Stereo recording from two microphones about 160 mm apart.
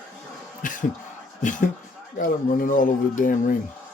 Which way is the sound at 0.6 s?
55° left (ahead or behind).